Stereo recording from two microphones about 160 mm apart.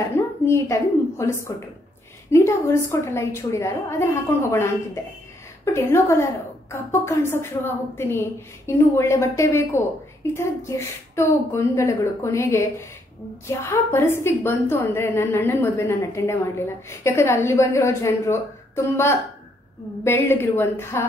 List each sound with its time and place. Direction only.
0.5 s a woman's voice: 20° left (ahead or behind)
5.7 s a woman's voice: 15° left (ahead or behind)